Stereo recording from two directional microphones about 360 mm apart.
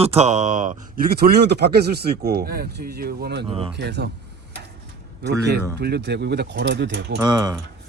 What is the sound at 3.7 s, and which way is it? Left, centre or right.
Speech, right.